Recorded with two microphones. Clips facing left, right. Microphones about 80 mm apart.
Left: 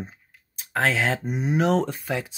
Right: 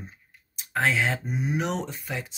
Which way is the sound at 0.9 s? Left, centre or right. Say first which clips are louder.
Left 2 dB; left.